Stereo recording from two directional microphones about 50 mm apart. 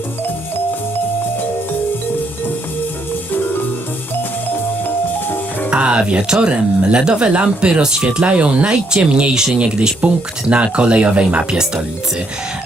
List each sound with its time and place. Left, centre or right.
5.7 s speech: right